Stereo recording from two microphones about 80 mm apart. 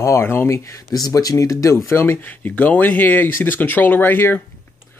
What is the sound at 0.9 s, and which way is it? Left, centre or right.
Speech, left.